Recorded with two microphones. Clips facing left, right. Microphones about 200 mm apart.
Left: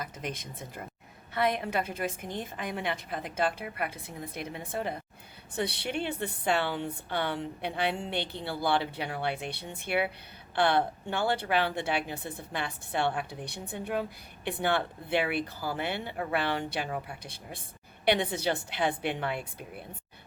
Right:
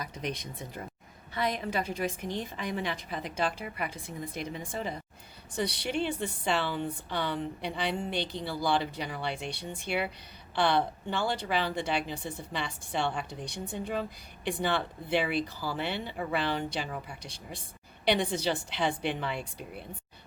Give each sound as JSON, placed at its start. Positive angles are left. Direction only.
{"t": 0.0, "sound": "a woman's voice", "side_deg": 50}